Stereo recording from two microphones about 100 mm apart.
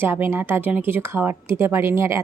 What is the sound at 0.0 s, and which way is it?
Speech, 20° right (ahead or behind).